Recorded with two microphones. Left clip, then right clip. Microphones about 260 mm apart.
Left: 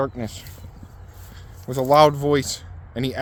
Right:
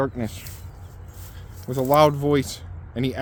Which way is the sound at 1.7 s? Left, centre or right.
Left.